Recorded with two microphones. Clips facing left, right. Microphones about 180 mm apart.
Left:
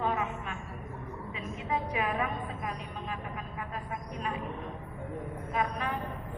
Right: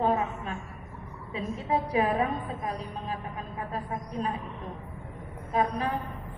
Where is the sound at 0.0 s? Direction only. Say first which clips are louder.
Right 5 dB; 35° right (ahead or behind).